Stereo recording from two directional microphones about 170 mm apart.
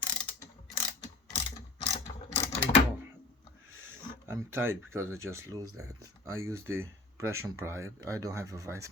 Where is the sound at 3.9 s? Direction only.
15° right (ahead or behind).